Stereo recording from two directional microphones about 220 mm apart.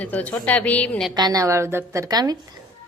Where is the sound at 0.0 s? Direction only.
5° left (ahead or behind).